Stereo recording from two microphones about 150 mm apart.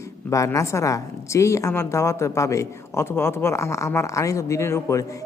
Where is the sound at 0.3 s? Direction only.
20° left (ahead or behind).